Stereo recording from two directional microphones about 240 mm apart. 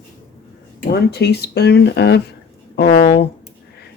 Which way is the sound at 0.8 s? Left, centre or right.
Left.